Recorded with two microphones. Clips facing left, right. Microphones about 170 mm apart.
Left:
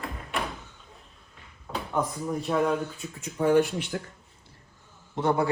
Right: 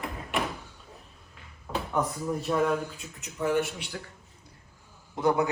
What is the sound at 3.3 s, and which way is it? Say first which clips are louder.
Speech: left 5 dB; 30° left (ahead or behind).